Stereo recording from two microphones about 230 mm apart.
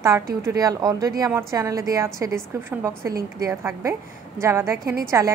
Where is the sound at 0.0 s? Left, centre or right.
Centre.